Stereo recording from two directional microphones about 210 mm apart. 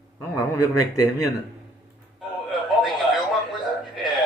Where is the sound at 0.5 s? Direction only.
15° left (ahead or behind).